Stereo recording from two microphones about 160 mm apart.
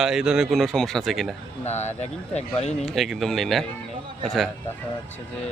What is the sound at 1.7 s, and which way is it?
Speech, 45° left (ahead or behind).